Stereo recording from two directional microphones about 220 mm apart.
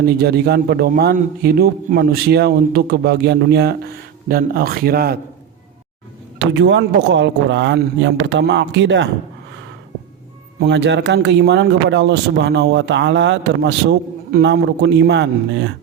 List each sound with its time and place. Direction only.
0.0 s speech: 45° right (ahead or behind)
6.6 s speech: 55° right (ahead or behind)
10.6 s speech: 50° right (ahead or behind)